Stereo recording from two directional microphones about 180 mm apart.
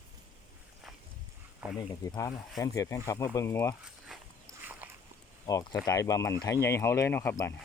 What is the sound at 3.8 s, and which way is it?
Dog, centre (ahead or behind).